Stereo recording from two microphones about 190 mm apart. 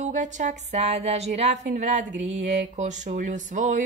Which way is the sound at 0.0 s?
40° right (ahead or behind).